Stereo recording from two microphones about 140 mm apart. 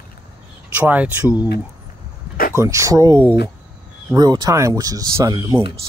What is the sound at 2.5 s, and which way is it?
Speech, 20° right (ahead or behind).